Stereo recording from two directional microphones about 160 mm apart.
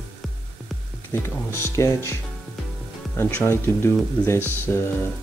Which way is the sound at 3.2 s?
15° left (ahead or behind).